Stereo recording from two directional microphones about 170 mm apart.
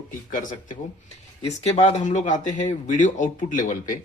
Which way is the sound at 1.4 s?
40° left (ahead or behind).